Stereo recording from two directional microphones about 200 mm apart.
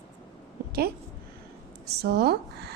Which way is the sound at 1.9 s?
55° right (ahead or behind).